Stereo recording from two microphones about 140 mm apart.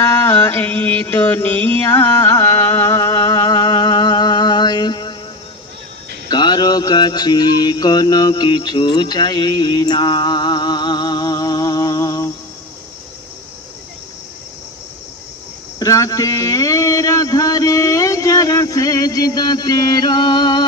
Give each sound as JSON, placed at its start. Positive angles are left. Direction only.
{"t": 0.0, "sound": "mantra", "side_deg": 15}
{"t": 6.2, "sound": "a sound", "side_deg": 30}
{"t": 15.8, "sound": "speech", "side_deg": 25}